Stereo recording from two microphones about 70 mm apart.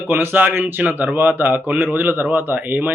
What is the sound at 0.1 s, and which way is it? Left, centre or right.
Speech, right.